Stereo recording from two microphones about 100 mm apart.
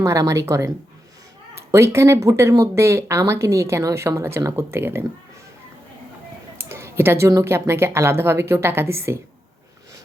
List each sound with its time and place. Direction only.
0.0 s a woman's voice: 30° right (ahead or behind)
1.7 s speech: 30° right (ahead or behind)
6.6 s a sound: 25° right (ahead or behind)
7.3 s speech: 30° right (ahead or behind)